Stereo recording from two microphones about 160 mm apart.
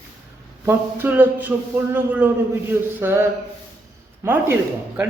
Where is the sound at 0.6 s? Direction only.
15° right (ahead or behind).